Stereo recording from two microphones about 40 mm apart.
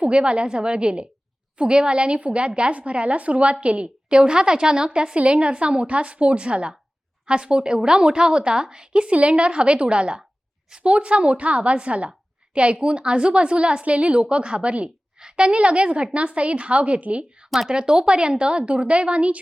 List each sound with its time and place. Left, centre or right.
0.0 s a woman's voice: right
3.8 s a woman's voice: right
17.7 s a woman's voice: centre